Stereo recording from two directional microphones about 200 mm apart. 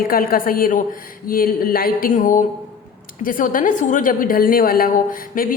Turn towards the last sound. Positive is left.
turn(degrees=45)  # may be behind; listen again after turning